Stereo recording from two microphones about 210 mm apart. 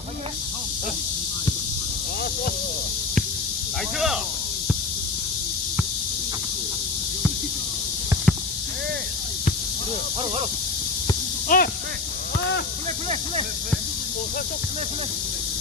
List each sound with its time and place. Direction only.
3.9 s speech: centre (ahead or behind)
11.4 s snake: 45° left (ahead or behind)